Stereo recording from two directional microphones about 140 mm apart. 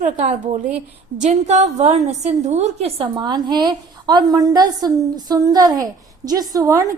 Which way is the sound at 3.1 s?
30° right (ahead or behind).